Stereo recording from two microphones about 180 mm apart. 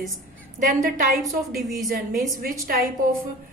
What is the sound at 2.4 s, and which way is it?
Speech, 55° right (ahead or behind).